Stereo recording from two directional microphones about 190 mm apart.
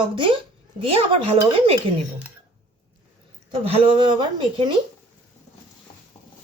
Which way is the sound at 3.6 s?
30° right (ahead or behind).